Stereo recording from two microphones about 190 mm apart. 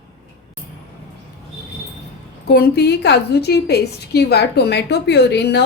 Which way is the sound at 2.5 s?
55° left (ahead or behind).